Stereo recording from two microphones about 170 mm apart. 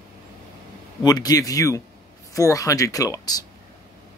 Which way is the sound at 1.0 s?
20° left (ahead or behind).